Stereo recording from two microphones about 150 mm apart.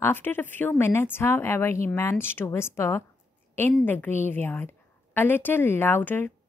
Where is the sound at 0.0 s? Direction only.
15° left (ahead or behind).